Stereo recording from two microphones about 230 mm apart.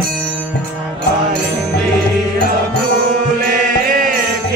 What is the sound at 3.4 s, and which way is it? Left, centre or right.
Music, right.